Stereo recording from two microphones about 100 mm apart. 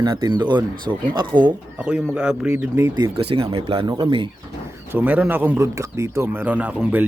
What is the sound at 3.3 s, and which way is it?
Speech, 65° right (ahead or behind).